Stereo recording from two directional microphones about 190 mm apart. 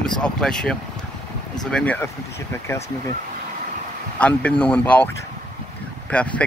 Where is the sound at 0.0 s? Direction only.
5° left (ahead or behind).